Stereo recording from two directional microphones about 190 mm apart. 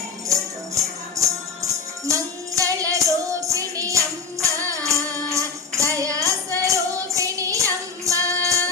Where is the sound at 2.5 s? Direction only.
15° right (ahead or behind).